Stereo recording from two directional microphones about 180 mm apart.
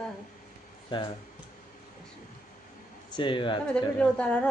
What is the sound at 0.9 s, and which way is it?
Mantra, 30° left (ahead or behind).